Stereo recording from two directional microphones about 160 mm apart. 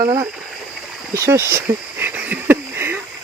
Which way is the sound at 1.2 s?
15° right (ahead or behind).